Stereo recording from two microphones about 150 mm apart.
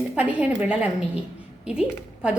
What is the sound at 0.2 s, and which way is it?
A woman's voice, 10° right (ahead or behind).